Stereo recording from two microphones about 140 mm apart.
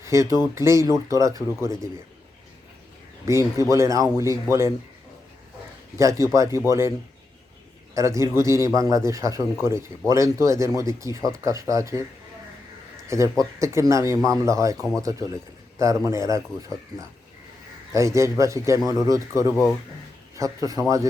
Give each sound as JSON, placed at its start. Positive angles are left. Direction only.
{"t": 0.0, "sound": "speech", "side_deg": -20}
{"t": 3.2, "sound": "speech", "side_deg": -20}
{"t": 6.0, "sound": "speech", "side_deg": -20}
{"t": 7.9, "sound": "speech", "side_deg": -20}
{"t": 13.1, "sound": "speech", "side_deg": -20}